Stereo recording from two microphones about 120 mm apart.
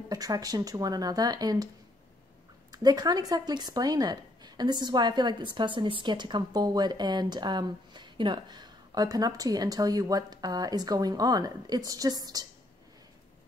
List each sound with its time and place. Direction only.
0.1 s a woman's voice: 30° right (ahead or behind)
2.7 s a woman's voice: 35° right (ahead or behind)